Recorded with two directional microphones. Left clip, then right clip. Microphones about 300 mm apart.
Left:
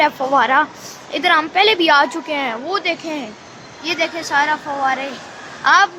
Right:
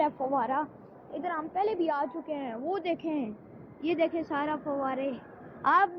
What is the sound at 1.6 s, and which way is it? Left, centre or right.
A woman's voice, centre.